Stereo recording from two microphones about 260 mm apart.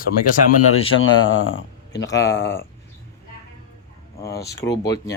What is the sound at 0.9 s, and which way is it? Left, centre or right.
Speech, left.